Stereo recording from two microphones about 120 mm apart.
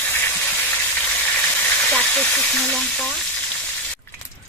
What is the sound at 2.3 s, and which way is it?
Frying, 5° left (ahead or behind).